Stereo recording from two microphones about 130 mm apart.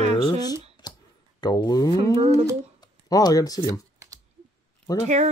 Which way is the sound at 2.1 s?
50° right (ahead or behind).